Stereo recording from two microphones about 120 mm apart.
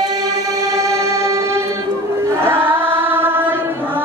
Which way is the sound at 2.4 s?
20° right (ahead or behind).